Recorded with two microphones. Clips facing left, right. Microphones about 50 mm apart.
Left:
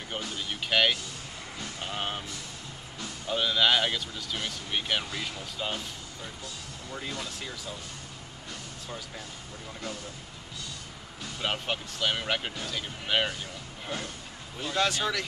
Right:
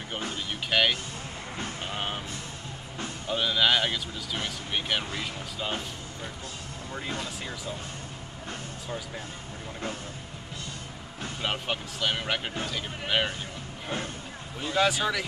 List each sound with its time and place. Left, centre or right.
0.5 s vehicle: centre
2.0 s vehicle: centre
3.3 s speech: centre
7.1 s speech: right
11.4 s speech: centre
13.8 s speech: right
14.6 s speech: centre